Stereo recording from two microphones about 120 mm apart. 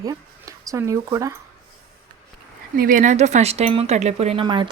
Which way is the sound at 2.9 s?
90° right.